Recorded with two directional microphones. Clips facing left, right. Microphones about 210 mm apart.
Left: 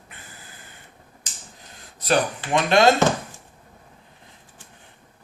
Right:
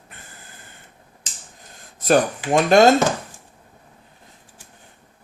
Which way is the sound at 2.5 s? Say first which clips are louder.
Right 4 dB; 45° right (ahead or behind).